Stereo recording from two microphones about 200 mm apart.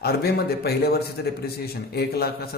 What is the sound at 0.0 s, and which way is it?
A man's voice, 50° left (ahead or behind).